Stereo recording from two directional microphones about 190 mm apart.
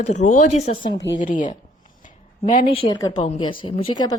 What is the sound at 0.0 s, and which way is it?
Speech, 35° left (ahead or behind).